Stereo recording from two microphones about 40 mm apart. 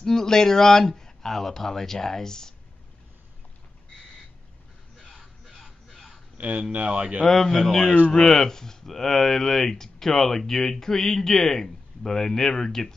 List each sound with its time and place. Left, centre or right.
0.0 s speech: centre
5.1 s a sound: centre
6.3 s speech: right
7.2 s speech: centre